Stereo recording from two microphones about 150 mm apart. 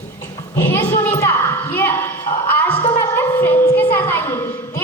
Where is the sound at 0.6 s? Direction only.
15° left (ahead or behind).